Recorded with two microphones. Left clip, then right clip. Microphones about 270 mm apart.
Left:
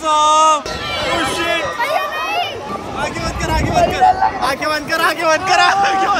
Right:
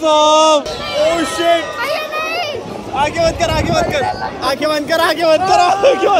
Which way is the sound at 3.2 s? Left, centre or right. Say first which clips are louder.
Right 6 dB; centre.